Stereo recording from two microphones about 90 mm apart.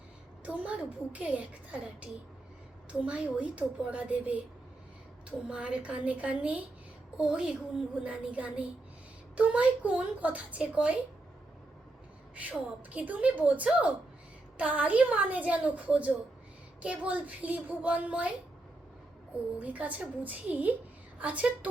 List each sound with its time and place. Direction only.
0.4 s a woman's voice: 15° right (ahead or behind)
3.1 s a woman's voice: 15° right (ahead or behind)
5.5 s a woman's voice: 10° right (ahead or behind)
12.4 s a woman's voice: 15° right (ahead or behind)
19.5 s a woman's voice: 15° right (ahead or behind)